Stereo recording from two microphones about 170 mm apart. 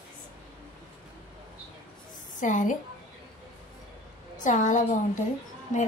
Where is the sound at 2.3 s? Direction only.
50° left (ahead or behind).